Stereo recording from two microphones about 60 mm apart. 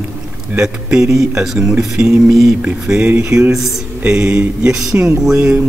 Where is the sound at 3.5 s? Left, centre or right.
Centre.